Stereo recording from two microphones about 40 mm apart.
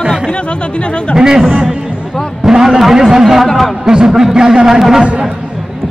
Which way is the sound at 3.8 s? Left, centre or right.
Centre.